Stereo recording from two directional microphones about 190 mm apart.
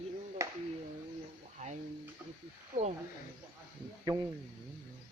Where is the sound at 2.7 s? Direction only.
45° right (ahead or behind).